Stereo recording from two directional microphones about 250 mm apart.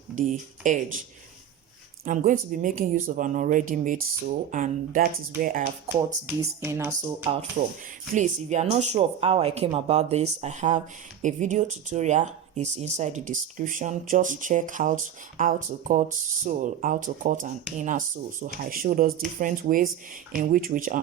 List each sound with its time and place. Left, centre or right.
0.2 s speech: right
2.0 s speech: right
6.2 s speech: centre
7.6 s speech: right